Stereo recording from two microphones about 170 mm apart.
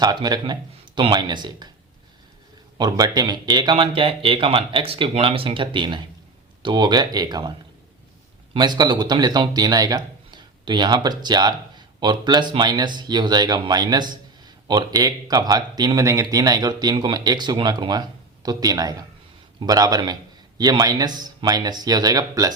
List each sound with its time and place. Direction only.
0.0 s speech: 25° right (ahead or behind)
2.7 s speech: 25° right (ahead or behind)
8.5 s speech: 25° right (ahead or behind)